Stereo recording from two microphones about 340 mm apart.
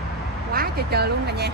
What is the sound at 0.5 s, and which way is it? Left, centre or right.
Speech, right.